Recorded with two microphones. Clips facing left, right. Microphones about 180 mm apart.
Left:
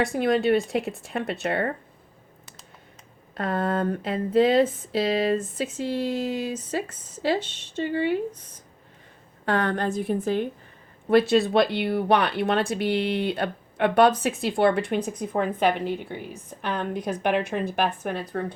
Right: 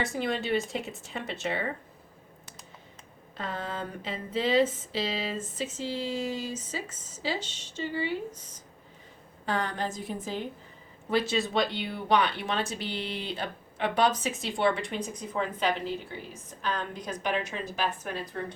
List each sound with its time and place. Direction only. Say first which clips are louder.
0.0 s speech: left 8 dB; 60° left (ahead or behind)
3.3 s speech: left 10 dB; 60° left (ahead or behind)